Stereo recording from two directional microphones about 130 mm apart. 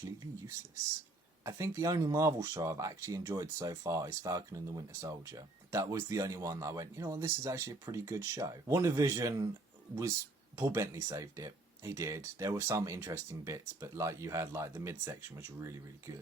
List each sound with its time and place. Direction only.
1.5 s speech: 25° right (ahead or behind)